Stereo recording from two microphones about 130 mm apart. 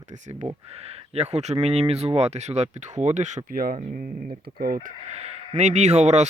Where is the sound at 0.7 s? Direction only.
55° right (ahead or behind); by 4.1 s 90° right.